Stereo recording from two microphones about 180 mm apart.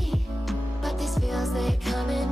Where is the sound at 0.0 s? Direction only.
Centre (ahead or behind).